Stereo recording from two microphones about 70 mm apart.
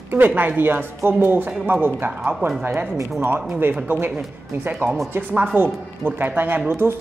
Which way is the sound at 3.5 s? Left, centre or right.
Right.